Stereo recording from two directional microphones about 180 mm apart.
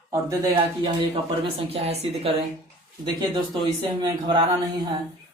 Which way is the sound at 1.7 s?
35° right (ahead or behind).